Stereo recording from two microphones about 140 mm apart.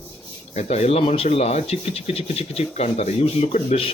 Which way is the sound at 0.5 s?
45° left (ahead or behind).